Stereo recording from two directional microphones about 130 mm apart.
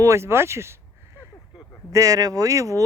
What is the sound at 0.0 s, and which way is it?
Speech, 20° right (ahead or behind).